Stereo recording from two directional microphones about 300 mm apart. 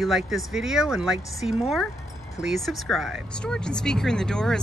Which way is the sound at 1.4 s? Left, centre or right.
Centre.